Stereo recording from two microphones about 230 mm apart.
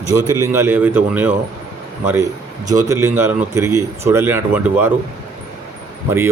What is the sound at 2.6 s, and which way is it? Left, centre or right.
Speech, centre.